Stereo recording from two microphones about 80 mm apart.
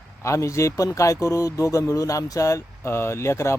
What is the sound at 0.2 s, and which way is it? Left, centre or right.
A man's voice, left.